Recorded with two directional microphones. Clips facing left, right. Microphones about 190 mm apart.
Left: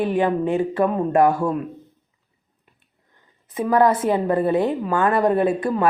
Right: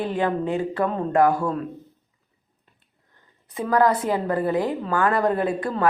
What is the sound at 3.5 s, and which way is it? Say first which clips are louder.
Speech: left 2 dB; 20° left (ahead or behind).